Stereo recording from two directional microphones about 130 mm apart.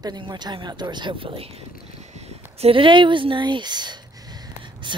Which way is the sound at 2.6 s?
45° right (ahead or behind).